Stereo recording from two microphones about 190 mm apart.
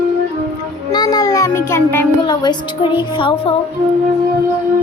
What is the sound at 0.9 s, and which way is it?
A child's voice, 20° left (ahead or behind).